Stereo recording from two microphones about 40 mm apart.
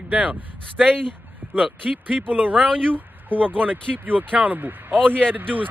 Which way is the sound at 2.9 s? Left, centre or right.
Right.